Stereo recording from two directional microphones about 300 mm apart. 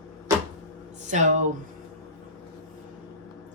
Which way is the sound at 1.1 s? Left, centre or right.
Right.